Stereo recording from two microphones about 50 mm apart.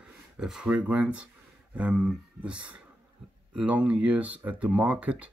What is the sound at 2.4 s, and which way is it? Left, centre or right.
Speech, right.